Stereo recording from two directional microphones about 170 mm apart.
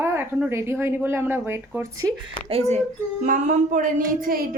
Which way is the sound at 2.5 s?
40° right (ahead or behind).